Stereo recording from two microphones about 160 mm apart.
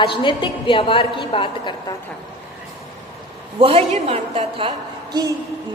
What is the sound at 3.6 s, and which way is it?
A woman's voice, 35° right (ahead or behind).